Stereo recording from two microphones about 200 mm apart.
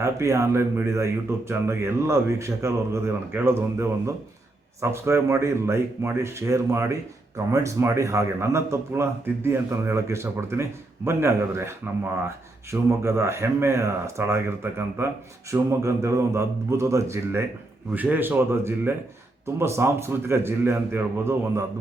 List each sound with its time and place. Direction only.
0.0 s a man's voice: 15° right (ahead or behind)
12.9 s a man's voice: 15° right (ahead or behind)